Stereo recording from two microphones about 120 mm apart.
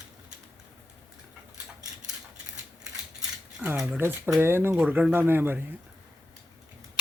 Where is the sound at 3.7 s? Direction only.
5° right (ahead or behind).